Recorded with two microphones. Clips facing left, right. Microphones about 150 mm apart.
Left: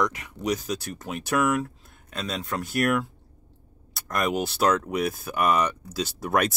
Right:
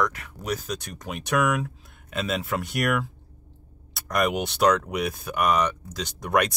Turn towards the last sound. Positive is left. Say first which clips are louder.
# even
turn(degrees=5)  # may be behind; listen again after turning